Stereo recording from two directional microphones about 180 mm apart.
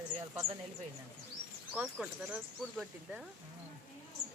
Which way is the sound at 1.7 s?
5° right (ahead or behind).